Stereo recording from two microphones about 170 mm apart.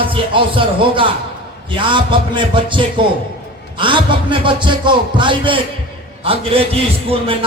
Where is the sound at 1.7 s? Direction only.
30° right (ahead or behind).